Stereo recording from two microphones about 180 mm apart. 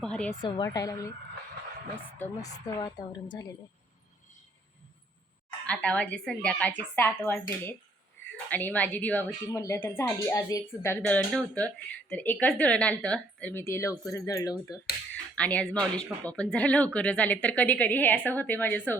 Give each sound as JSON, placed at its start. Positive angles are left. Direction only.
{"t": 0.0, "sound": "speech", "side_deg": 5}
{"t": 0.4, "sound": "a woman's voice", "side_deg": 25}
{"t": 2.1, "sound": "a woman's voice", "side_deg": 15}
{"t": 5.6, "sound": "a woman's voice", "side_deg": 5}
{"t": 15.4, "sound": "speech", "side_deg": 5}